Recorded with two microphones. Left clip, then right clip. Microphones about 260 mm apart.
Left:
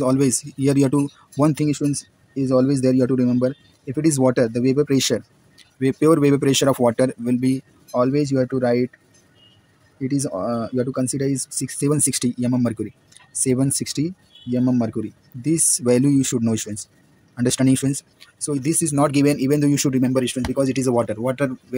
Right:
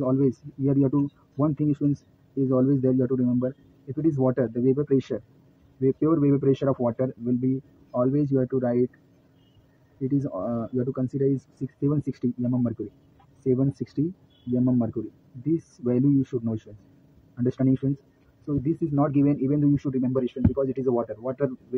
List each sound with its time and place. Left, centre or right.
0.0 s speech: left
2.5 s speech: left
7.9 s speech: left
10.0 s speech: left
13.7 s speech: left